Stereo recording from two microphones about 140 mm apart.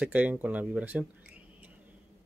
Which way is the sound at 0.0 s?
10° right (ahead or behind).